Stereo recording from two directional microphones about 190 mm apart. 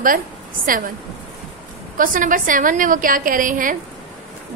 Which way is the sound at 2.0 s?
45° right (ahead or behind).